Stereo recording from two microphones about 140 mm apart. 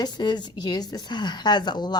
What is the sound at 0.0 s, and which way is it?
A woman's voice, 30° left (ahead or behind).